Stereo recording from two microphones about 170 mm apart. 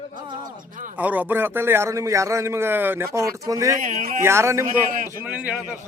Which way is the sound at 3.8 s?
50° right (ahead or behind).